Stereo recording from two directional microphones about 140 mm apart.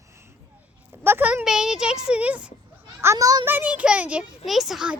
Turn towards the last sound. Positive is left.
turn(degrees=0)  # may be behind; listen again after turning